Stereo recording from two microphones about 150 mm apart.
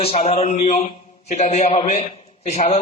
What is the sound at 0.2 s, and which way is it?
A man's voice, 45° left (ahead or behind).